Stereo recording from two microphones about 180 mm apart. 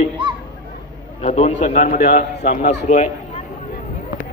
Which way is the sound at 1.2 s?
40° left (ahead or behind).